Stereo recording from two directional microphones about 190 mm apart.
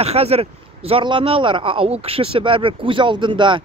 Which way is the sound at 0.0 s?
30° right (ahead or behind).